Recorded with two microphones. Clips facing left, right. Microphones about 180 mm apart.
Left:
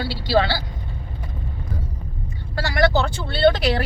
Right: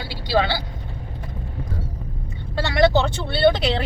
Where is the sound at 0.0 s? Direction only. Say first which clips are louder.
Left 2 dB; 15° right (ahead or behind).